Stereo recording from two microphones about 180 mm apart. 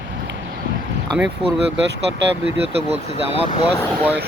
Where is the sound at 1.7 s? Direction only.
75° right (ahead or behind).